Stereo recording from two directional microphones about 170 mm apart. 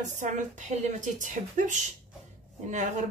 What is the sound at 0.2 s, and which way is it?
Speech, 45° right (ahead or behind).